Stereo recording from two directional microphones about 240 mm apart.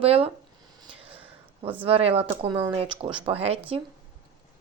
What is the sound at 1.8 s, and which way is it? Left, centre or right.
Speech, right.